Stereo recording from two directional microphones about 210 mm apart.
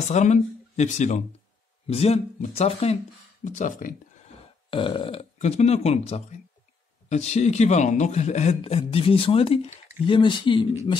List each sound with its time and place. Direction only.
0.1 s a man's voice: 35° left (ahead or behind)
4.6 s a man's voice: 25° left (ahead or behind)